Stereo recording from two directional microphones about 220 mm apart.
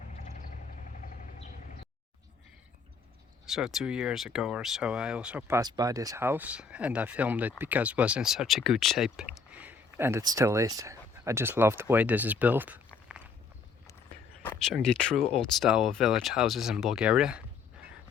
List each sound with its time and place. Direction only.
0.2 s vehicle: 35° left (ahead or behind)
3.4 s speech: centre (ahead or behind)
14.4 s speech: 5° left (ahead or behind)